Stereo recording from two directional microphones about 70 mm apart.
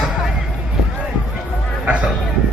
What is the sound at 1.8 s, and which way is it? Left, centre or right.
Speech, centre.